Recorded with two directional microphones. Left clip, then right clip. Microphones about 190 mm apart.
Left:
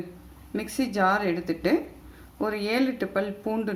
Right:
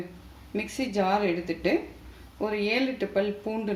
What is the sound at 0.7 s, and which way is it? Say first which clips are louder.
Speech: left 3 dB; 40° left (ahead or behind).